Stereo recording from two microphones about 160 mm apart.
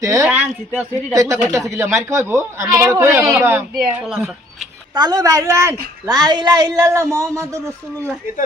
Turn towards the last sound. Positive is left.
turn(degrees=-20)  # may be behind; listen again after turning